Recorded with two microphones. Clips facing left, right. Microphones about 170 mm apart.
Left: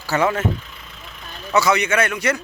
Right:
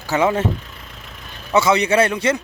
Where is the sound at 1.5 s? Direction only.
25° right (ahead or behind).